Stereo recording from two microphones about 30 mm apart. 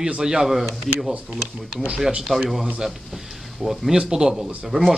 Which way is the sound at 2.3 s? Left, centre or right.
Centre.